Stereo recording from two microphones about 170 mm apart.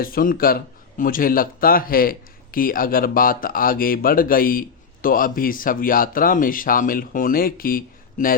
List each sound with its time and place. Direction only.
0.0 s speech: 55° left (ahead or behind)